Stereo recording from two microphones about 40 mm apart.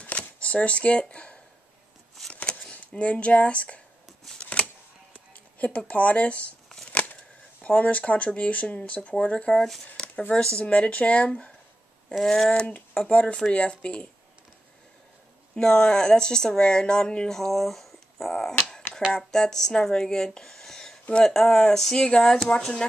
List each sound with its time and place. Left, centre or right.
0.0 s camera: left
3.0 s speech: left
4.4 s shuffling cards: left
5.1 s a sound: left
7.6 s speech: left
9.5 s speech: centre
9.9 s a sound: left
10.3 s speech: left
10.6 s speech: left
12.2 s speech: centre
12.4 s speech: left
15.5 s speech: centre
17.3 s speech: centre
19.1 s speech: centre